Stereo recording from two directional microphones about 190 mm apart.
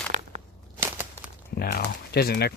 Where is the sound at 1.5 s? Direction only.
60° left (ahead or behind).